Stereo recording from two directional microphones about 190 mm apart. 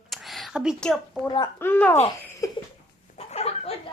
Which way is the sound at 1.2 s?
20° left (ahead or behind).